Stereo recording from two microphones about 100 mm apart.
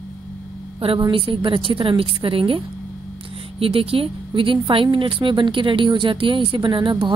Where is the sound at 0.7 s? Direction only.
65° right (ahead or behind).